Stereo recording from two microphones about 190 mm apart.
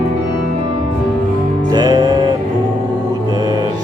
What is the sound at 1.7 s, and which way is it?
Music, 20° right (ahead or behind).